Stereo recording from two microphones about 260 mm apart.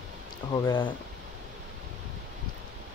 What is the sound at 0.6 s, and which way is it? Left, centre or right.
Speech, centre.